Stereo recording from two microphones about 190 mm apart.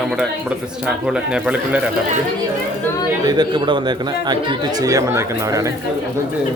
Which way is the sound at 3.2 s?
25° right (ahead or behind).